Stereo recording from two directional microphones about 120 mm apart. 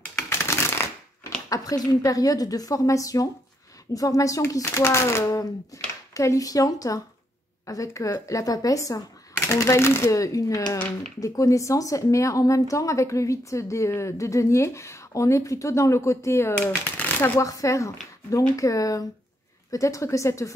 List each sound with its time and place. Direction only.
0.3 s shuffling cards: 20° left (ahead or behind)
1.5 s speech: 30° left (ahead or behind); by 17.3 s 15° left (ahead or behind)
17.4 s speech: 25° left (ahead or behind)